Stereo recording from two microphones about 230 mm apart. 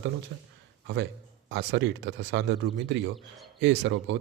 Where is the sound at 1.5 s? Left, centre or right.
Right.